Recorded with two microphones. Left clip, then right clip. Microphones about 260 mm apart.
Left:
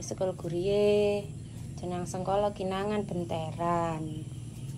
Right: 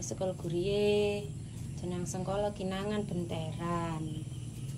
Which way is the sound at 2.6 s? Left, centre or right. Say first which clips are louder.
Left 5 dB; left.